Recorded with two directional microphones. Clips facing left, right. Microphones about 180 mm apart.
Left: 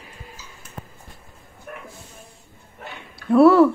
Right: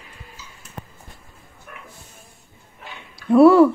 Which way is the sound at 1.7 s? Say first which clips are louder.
Left 6 dB; 50° left (ahead or behind).